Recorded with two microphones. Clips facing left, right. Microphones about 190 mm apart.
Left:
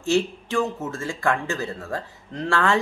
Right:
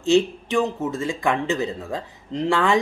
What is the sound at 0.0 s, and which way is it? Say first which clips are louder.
Speech: right 4 dB; 20° right (ahead or behind).